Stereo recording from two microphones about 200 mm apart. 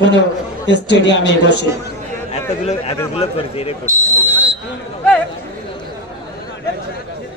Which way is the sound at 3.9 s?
15° right (ahead or behind).